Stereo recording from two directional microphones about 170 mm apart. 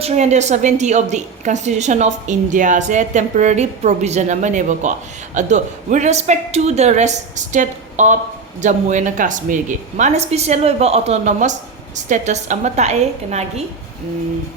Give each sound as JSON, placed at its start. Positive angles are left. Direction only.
{"t": 0.0, "sound": "a woman's voice", "side_deg": -40}